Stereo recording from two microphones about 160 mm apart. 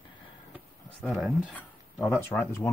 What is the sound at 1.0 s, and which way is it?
Speech, centre (ahead or behind).